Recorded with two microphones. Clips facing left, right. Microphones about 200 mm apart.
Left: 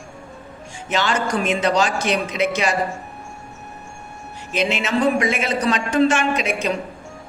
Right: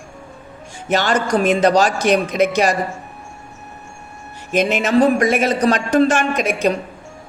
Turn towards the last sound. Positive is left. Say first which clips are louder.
# right 3 dB
turn(degrees=-50)  # may be behind; listen again after turning